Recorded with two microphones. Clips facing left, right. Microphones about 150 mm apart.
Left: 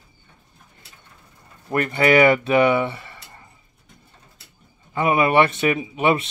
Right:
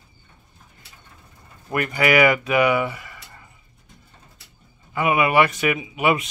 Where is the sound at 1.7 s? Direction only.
35° left (ahead or behind).